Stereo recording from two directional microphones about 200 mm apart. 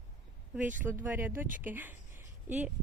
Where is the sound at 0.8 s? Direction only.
10° right (ahead or behind).